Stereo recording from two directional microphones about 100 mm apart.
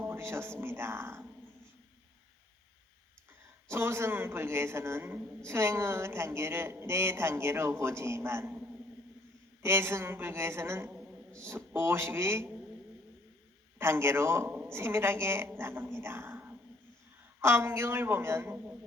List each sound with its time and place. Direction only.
0.0 s a sound: 25° right (ahead or behind)
0.6 s a woman's voice: 25° right (ahead or behind)
3.7 s a woman's voice: 25° right (ahead or behind)
9.6 s a woman's voice: 25° right (ahead or behind)
10.9 s a sound: 15° right (ahead or behind)
11.4 s a woman's voice: 25° right (ahead or behind)
13.7 s a man's voice: 25° right (ahead or behind)